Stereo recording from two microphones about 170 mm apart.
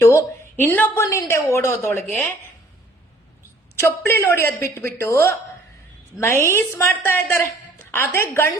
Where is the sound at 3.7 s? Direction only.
15° left (ahead or behind).